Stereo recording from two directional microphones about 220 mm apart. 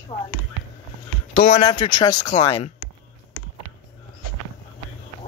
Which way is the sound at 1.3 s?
35° left (ahead or behind).